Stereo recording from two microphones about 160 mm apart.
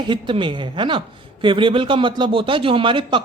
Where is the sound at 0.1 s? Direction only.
30° right (ahead or behind).